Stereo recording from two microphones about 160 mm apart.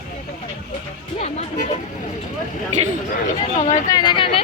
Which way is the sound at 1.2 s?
45° left (ahead or behind).